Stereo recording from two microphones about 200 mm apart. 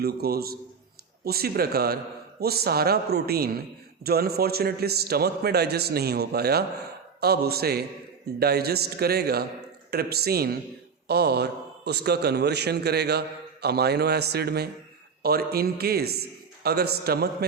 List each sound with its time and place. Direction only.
0.0 s a man's voice: 50° right (ahead or behind)